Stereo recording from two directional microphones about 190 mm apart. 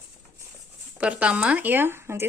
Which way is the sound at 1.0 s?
5° right (ahead or behind).